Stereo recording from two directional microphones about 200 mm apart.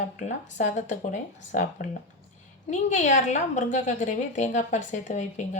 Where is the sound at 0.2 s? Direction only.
35° left (ahead or behind).